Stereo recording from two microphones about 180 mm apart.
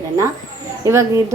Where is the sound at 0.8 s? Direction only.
15° right (ahead or behind).